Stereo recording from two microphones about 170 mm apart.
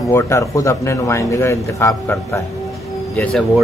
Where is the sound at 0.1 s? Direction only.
15° left (ahead or behind).